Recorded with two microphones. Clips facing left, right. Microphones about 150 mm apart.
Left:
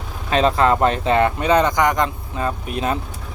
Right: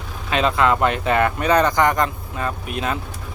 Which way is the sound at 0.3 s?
35° left (ahead or behind).